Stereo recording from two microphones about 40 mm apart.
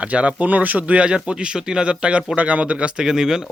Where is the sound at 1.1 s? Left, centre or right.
Right.